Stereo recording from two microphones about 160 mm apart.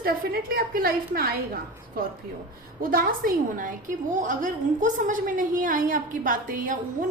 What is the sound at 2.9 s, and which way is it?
A woman's voice, 60° right (ahead or behind).